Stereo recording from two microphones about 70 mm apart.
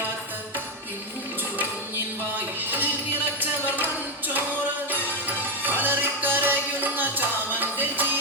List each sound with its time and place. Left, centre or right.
2.6 s music: right
5.6 s music: right